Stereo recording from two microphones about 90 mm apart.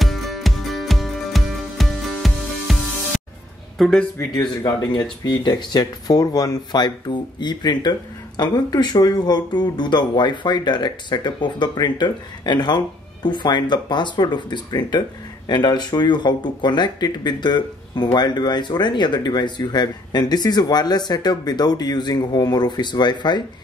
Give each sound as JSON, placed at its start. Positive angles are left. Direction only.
{"t": 0.0, "sound": "music", "side_deg": 0}
{"t": 3.7, "sound": "speech", "side_deg": 0}
{"t": 4.4, "sound": "speech", "side_deg": 50}